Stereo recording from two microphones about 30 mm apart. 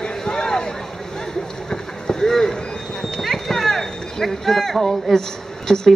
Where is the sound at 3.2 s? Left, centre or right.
Centre.